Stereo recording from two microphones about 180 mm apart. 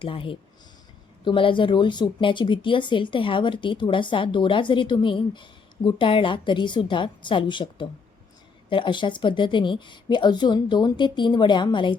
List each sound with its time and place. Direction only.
0.0 s speech: 30° left (ahead or behind)